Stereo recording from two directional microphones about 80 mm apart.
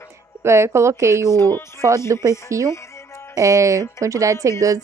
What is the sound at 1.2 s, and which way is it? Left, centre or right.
Speech, left.